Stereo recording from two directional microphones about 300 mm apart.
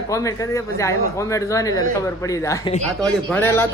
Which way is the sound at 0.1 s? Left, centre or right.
Centre.